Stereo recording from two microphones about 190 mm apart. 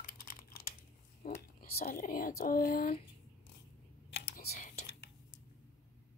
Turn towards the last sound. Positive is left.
turn(degrees=60)  # may be behind; listen again after turning